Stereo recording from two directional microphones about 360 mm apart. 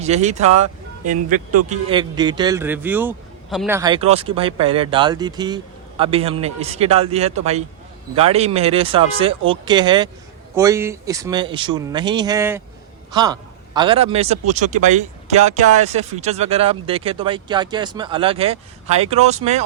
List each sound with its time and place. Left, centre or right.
0.0 s a man's voice: centre